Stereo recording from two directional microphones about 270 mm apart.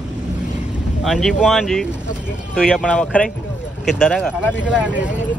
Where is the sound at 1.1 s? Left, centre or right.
Centre.